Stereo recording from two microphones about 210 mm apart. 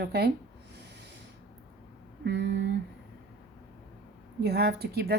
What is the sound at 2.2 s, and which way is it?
Speech, 55° right (ahead or behind).